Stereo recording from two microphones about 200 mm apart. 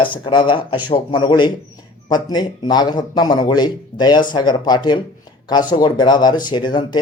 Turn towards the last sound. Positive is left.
turn(degrees=20)  # may be behind; listen again after turning